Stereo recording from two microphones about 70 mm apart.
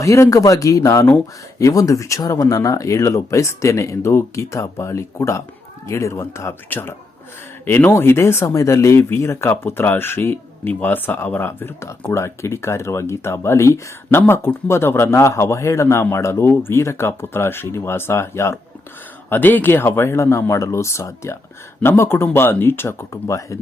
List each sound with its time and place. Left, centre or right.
0.0 s speech: left
19.3 s speech: left